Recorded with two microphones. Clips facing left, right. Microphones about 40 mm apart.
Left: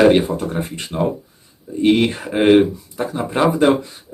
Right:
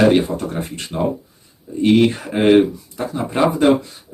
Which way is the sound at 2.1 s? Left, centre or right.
Centre.